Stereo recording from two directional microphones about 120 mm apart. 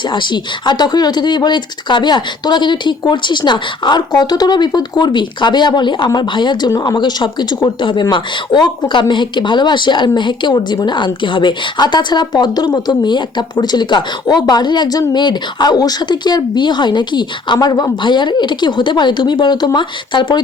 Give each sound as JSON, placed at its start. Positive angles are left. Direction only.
{"t": 0.1, "sound": "speech", "side_deg": 40}